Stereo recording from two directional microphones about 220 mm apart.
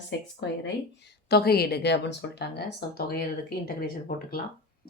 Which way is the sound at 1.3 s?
45° left (ahead or behind).